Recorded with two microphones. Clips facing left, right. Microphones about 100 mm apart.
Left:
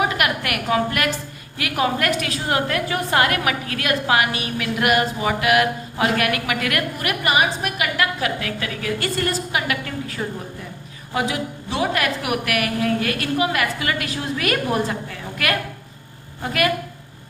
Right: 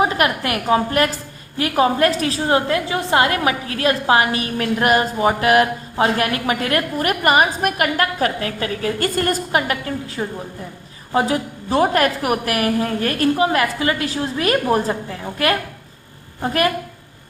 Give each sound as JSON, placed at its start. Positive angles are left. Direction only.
{"t": 0.0, "sound": "a woman's voice", "side_deg": -30}
{"t": 10.2, "sound": "a woman's voice", "side_deg": -15}
{"t": 11.1, "sound": "a woman's voice", "side_deg": -35}
{"t": 16.4, "sound": "a woman's voice", "side_deg": -35}